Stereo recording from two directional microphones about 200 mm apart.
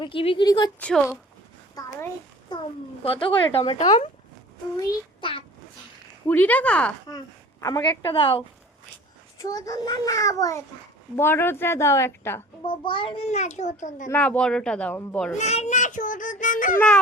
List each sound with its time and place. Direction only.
0.0 s speech: 25° left (ahead or behind)
0.8 s speech: 5° left (ahead or behind)
1.8 s a sound: 20° left (ahead or behind)
3.0 s speech: 25° left (ahead or behind)
4.8 s child singing: 25° left (ahead or behind)
6.2 s a child's voice: 10° left (ahead or behind)
7.6 s speech: 20° left (ahead or behind)
9.4 s a child's voice: 15° left (ahead or behind)
12.6 s a child's voice: 25° left (ahead or behind)
14.1 s speech: 5° left (ahead or behind)
15.4 s a child's voice: 35° left (ahead or behind)
16.7 s speech: 5° left (ahead or behind)